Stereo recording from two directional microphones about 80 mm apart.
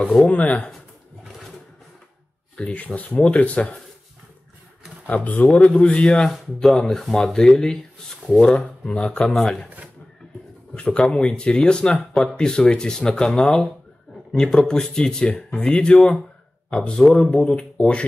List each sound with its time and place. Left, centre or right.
0.0 s speech: centre
2.5 s speech: centre
5.0 s speech: left
5.5 s speech: centre
10.7 s speech: centre